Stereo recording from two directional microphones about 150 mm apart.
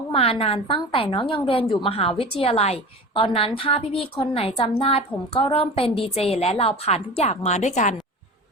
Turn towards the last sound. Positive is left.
turn(degrees=50)  # may be behind; listen again after turning